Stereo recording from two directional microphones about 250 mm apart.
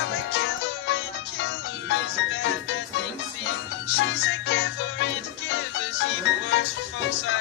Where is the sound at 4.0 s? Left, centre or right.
Left.